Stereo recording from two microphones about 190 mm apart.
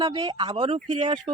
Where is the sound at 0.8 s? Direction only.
40° right (ahead or behind).